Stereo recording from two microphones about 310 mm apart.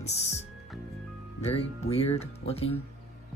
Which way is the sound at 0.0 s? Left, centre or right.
Left.